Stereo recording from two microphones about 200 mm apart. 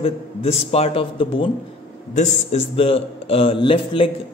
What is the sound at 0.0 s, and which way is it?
A man's voice, 30° left (ahead or behind).